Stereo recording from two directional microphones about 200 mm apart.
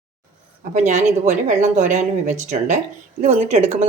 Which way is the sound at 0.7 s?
35° right (ahead or behind).